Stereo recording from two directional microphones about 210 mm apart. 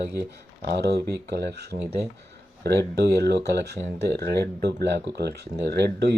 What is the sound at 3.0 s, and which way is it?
Speech, 50° right (ahead or behind).